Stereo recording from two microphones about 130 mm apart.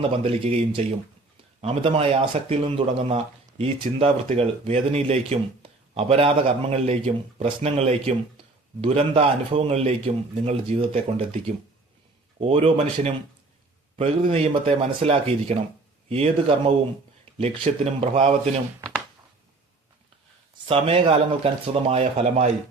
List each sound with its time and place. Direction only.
0.0 s a man's voice: 50° right (ahead or behind)
12.4 s a man's voice: 45° right (ahead or behind)
20.7 s a man's voice: 45° right (ahead or behind)
22.0 s speech: 60° right (ahead or behind)